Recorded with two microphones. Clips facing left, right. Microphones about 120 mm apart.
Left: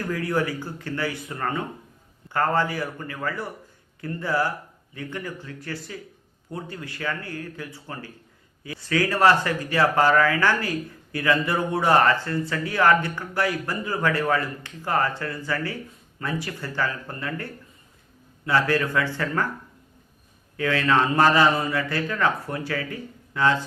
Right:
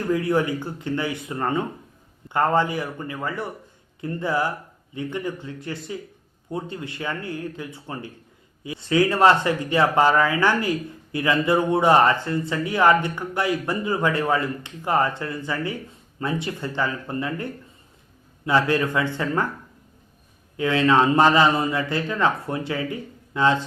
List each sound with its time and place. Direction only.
0.0 s speech: 20° right (ahead or behind)
20.6 s speech: 20° right (ahead or behind)